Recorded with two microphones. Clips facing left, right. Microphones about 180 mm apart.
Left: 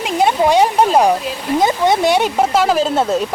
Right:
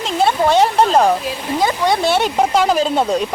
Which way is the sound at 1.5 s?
20° left (ahead or behind).